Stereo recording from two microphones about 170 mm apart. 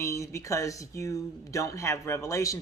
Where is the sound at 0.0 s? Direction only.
15° left (ahead or behind).